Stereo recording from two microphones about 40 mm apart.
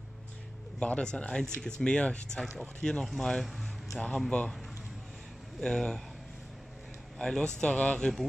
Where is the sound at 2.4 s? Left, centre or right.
Centre.